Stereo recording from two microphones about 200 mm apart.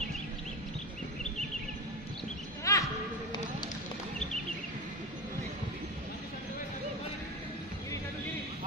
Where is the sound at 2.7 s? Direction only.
15° left (ahead or behind).